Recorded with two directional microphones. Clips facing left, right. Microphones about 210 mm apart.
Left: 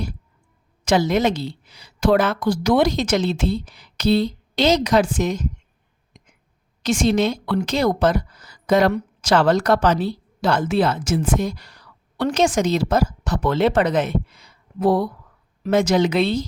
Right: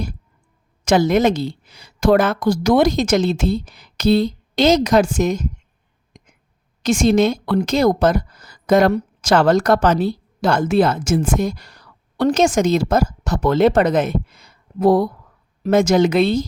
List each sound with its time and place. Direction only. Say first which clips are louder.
0.9 s a woman's voice: right 3 dB; 50° right (ahead or behind)
6.8 s a woman's voice: right 4 dB; 45° right (ahead or behind)